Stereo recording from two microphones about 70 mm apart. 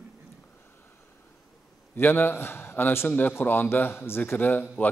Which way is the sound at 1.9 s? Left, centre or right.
Left.